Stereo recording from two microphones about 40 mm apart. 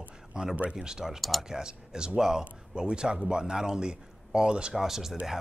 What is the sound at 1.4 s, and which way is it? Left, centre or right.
A man's voice, centre.